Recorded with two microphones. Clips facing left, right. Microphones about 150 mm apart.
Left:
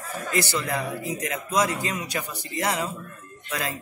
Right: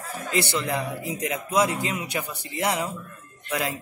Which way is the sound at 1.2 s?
20° right (ahead or behind).